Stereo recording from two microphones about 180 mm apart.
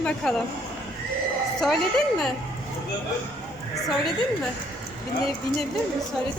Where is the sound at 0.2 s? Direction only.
5° left (ahead or behind).